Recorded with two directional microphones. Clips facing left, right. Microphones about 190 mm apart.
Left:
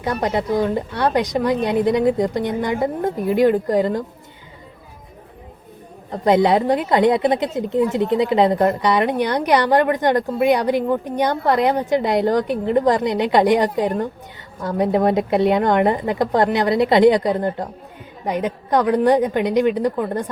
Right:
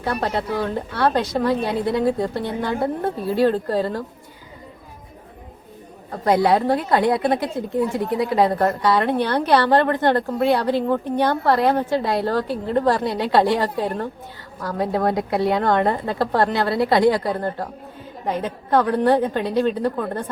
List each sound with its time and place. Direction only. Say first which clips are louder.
0.0 s a woman's voice: left 2 dB; 15° left (ahead or behind)
6.1 s a woman's voice: left 2 dB; 20° left (ahead or behind)